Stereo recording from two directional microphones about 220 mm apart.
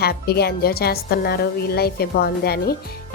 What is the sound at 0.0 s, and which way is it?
Speech, 45° left (ahead or behind).